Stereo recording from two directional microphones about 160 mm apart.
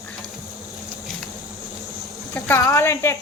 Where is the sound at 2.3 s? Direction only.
15° left (ahead or behind).